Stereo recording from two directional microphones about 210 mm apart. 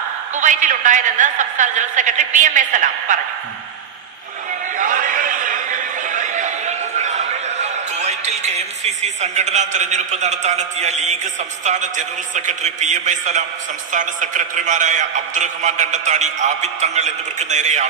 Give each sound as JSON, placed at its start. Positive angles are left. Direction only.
{"t": 0.3, "sound": "a man's voice", "side_deg": -35}
{"t": 4.8, "sound": "a sound", "side_deg": -40}
{"t": 11.6, "sound": "a man's voice", "side_deg": -35}